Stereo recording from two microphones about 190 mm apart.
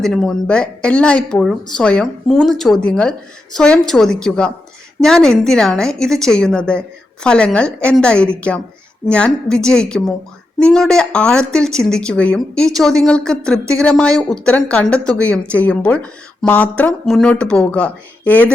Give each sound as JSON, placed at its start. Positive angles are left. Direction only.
{"t": 0.0, "sound": "speech", "side_deg": 5}